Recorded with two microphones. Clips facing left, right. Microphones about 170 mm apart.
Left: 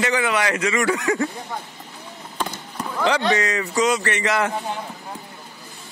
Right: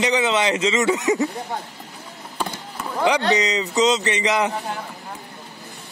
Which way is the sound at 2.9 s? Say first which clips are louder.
Right 1 dB; 15° right (ahead or behind).